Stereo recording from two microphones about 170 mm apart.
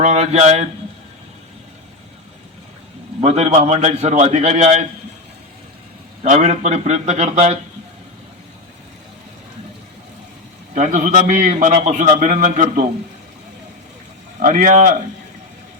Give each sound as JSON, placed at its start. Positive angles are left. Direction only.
{"t": 0.0, "sound": "a man's voice", "side_deg": -40}
{"t": 3.2, "sound": "a man's voice", "side_deg": -40}
{"t": 6.2, "sound": "a man's voice", "side_deg": -40}
{"t": 10.8, "sound": "a man's voice", "side_deg": -45}
{"t": 14.3, "sound": "a man's voice", "side_deg": -50}